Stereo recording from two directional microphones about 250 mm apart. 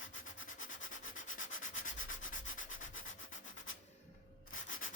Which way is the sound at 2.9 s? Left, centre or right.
Left.